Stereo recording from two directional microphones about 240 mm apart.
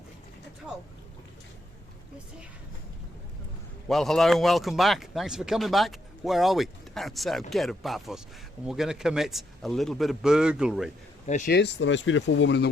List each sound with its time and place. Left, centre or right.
3.8 s speech: centre
11.3 s speech: left
11.5 s speech: left